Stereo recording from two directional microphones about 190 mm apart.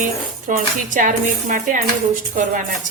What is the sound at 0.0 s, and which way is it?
Speech, 45° right (ahead or behind).